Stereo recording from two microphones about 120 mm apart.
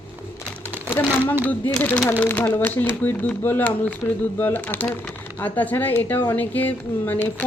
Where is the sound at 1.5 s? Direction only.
15° left (ahead or behind).